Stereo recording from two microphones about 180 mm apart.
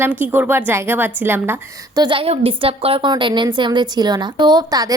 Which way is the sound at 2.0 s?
30° right (ahead or behind).